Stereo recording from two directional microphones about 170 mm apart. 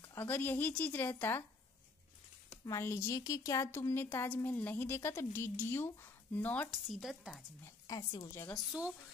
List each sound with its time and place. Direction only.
0.0 s a woman's voice: 15° left (ahead or behind)
2.6 s a woman's voice: 15° left (ahead or behind); by 7.4 s centre (ahead or behind)
7.6 s a woman's voice: 20° left (ahead or behind)